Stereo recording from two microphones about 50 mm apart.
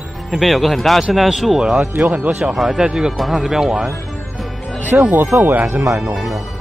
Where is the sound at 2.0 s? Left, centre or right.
Right.